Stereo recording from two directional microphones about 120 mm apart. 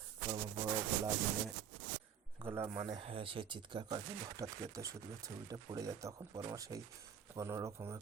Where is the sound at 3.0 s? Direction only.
50° right (ahead or behind).